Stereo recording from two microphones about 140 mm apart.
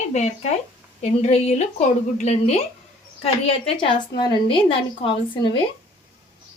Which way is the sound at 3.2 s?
40° left (ahead or behind).